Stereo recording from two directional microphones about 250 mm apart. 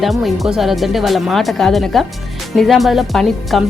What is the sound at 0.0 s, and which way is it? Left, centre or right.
Speech, centre.